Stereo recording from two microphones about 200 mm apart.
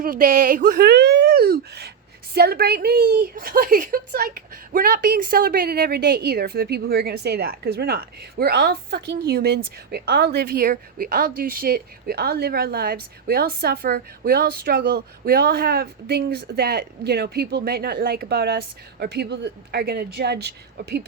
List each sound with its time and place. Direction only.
0.0 s a woman's voice: 45° right (ahead or behind)